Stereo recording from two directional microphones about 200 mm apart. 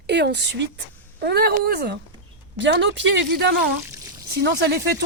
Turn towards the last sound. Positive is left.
turn(degrees=-55)  # may be behind; listen again after turning